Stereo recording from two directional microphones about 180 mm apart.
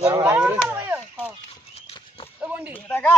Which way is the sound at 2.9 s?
10° left (ahead or behind).